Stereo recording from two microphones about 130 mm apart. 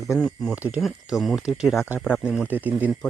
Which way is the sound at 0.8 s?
Centre (ahead or behind).